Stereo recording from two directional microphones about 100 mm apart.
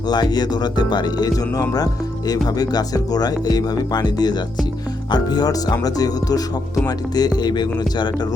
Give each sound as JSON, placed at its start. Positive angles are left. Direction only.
{"t": 0.1, "sound": "speech", "side_deg": 45}